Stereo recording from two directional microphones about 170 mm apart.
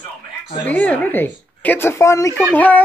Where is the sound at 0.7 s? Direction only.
10° left (ahead or behind).